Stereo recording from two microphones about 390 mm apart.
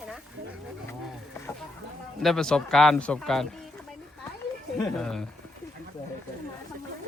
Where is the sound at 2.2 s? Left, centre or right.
Centre.